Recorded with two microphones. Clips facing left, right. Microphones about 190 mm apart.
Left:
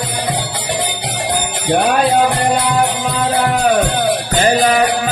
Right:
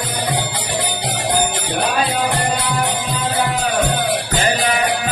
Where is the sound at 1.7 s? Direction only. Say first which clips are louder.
Left 6 dB; 60° left (ahead or behind).